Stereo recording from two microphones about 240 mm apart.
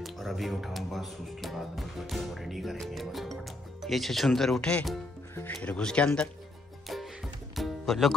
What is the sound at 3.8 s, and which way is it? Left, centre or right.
Speech, centre.